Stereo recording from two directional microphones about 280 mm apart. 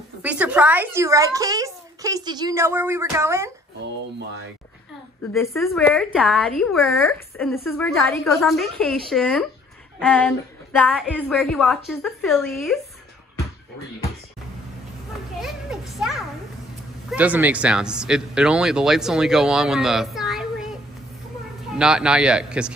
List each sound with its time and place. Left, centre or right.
0.2 s a child's voice: centre
5.3 s speech: centre
15.4 s children playing: centre
17.1 s speech: centre
21.7 s speech: centre